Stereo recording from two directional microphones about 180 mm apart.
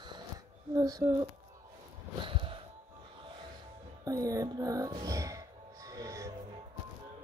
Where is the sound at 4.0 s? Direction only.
20° right (ahead or behind).